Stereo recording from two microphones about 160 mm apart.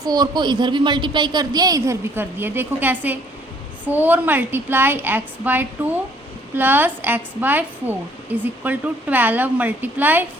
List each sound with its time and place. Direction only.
0.0 s a woman's voice: 25° right (ahead or behind)